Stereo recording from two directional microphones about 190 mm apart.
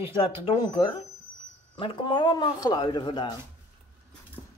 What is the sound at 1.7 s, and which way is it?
Speech, 25° left (ahead or behind).